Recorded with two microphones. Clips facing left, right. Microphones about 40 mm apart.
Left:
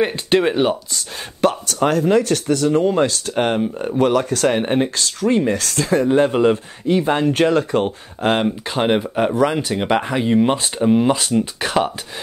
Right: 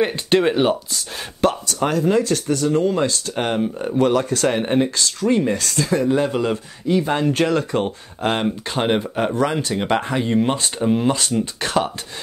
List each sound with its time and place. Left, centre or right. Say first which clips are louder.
0.0 s speech: left 1 dB; centre
2.0 s speech: left 2 dB; left
2.7 s speech: left 1 dB; left
3.3 s speech: left 4 dB; centre
4.0 s speech: left 1 dB; left
4.4 s speech: left 1 dB; centre
4.9 s speech: left 1 dB; left
5.3 s speech: left 1 dB; centre
5.8 s speech: left 4 dB; left
7.1 s speech: left 3 dB; centre